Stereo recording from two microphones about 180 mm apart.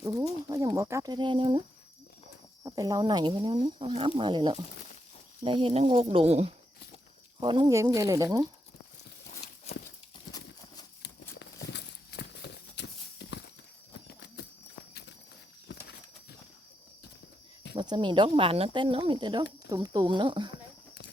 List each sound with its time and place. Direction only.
0.4 s speech: 20° right (ahead or behind)
2.6 s speech: 20° right (ahead or behind)
11.0 s walk: 70° left (ahead or behind)
14.1 s clip-clop: 70° left (ahead or behind)
15.7 s a sound: 65° left (ahead or behind)
17.7 s speech: 25° right (ahead or behind)